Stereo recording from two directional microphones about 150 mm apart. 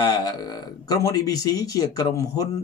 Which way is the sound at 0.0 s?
25° left (ahead or behind).